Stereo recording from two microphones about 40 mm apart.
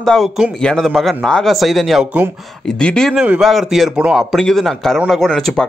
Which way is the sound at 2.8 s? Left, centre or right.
Left.